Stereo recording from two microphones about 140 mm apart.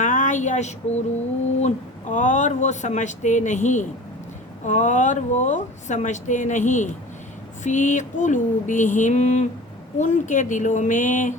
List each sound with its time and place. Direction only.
0.0 s a woman's voice: 65° left (ahead or behind)